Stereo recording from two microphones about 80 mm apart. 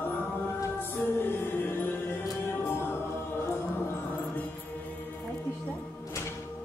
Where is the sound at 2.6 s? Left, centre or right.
Left.